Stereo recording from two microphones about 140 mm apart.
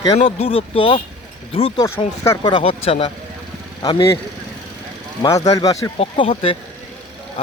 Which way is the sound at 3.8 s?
30° left (ahead or behind).